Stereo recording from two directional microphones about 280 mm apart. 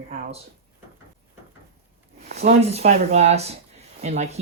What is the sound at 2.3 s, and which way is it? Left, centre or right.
Speech, right.